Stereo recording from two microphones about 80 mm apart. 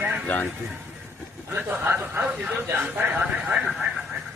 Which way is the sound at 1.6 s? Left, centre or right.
Right.